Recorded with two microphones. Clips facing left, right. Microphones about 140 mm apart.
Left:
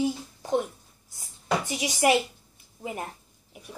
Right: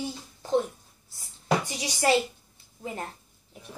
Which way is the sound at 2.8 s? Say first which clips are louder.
Left 1 dB; 15° left (ahead or behind).